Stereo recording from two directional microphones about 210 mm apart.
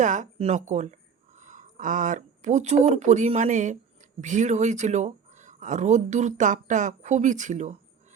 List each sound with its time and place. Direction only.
0.0 s speech: 35° right (ahead or behind)